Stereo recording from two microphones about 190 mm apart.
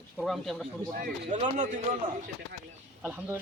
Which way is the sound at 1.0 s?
50° right (ahead or behind).